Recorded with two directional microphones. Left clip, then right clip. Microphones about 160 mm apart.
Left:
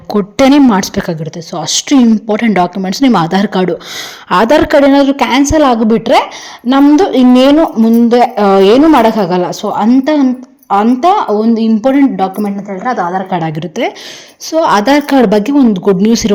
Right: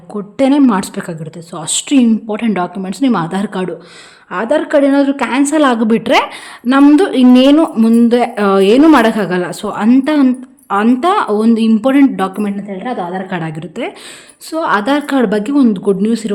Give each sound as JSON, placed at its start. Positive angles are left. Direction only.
{"t": 0.1, "sound": "a woman's voice", "side_deg": 30}
{"t": 4.3, "sound": "a woman's voice", "side_deg": 45}
{"t": 4.7, "sound": "a woman's voice", "side_deg": 20}
{"t": 5.4, "sound": "a woman's voice", "side_deg": 5}
{"t": 8.8, "sound": "a woman's voice", "side_deg": -5}
{"t": 13.3, "sound": "a woman's voice", "side_deg": 15}
{"t": 16.0, "sound": "a woman's voice", "side_deg": 20}